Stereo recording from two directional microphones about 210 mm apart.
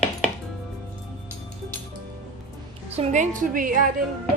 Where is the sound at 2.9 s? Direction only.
35° right (ahead or behind).